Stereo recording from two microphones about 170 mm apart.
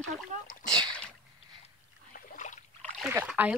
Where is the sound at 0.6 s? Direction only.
25° right (ahead or behind).